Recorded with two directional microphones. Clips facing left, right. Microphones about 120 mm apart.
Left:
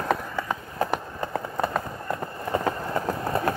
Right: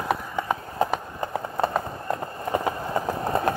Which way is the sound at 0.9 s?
10° right (ahead or behind).